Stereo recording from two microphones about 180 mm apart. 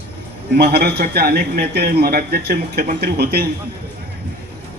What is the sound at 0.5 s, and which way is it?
A man's voice, 60° right (ahead or behind).